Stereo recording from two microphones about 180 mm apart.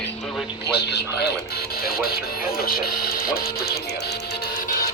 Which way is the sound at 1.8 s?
55° left (ahead or behind).